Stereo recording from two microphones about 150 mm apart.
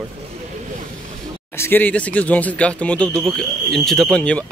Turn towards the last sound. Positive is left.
turn(degrees=5)  # may be behind; listen again after turning